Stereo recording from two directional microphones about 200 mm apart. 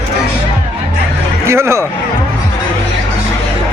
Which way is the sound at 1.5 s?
15° right (ahead or behind).